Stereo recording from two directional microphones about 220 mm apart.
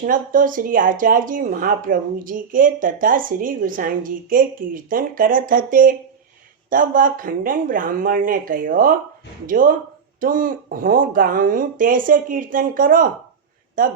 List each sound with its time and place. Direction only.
0.0 s speech: 40° right (ahead or behind)